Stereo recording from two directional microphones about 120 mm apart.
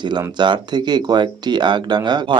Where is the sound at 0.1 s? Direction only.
40° right (ahead or behind).